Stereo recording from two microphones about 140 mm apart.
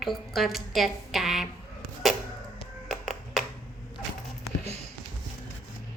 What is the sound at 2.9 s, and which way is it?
Clapping, centre (ahead or behind).